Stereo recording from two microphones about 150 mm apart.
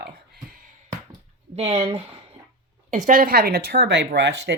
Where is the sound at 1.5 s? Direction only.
40° right (ahead or behind).